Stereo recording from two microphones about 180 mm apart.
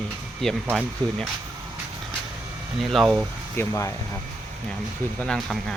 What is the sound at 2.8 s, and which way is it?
Speech, centre (ahead or behind).